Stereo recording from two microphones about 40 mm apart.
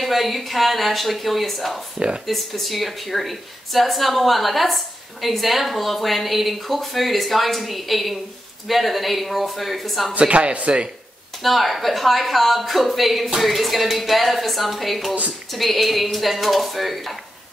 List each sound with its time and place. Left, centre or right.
0.0 s speech: centre
10.1 s speech: right
11.4 s speech: centre